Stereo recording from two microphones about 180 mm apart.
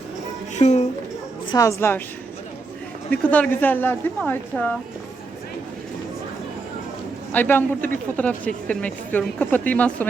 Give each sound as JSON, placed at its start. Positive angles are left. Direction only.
{"t": 0.5, "sound": "speech", "side_deg": 40}
{"t": 1.5, "sound": "speech", "side_deg": 20}
{"t": 3.1, "sound": "speech", "side_deg": 10}
{"t": 7.3, "sound": "speech", "side_deg": 10}